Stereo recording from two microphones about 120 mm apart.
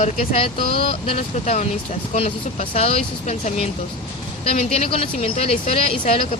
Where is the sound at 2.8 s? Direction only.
60° left (ahead or behind).